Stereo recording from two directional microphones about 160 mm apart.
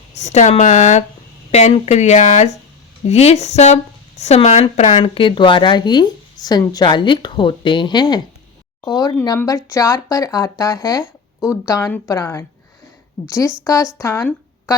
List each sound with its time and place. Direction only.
0.2 s speech: 45° left (ahead or behind); by 12.5 s 20° left (ahead or behind)
13.7 s speech: 20° left (ahead or behind)